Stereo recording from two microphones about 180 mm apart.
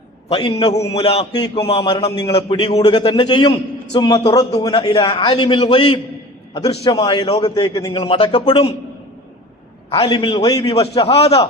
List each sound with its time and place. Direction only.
0.3 s a man's voice: 30° left (ahead or behind)
9.9 s a man's voice: 30° left (ahead or behind)